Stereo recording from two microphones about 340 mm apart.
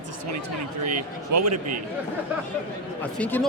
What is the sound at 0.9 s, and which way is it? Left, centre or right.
Speech, right.